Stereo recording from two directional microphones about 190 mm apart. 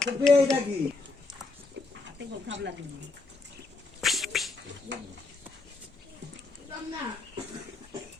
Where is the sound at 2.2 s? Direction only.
70° right (ahead or behind).